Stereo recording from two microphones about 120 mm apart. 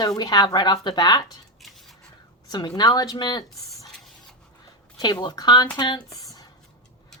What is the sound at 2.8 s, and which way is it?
Speech, 35° left (ahead or behind).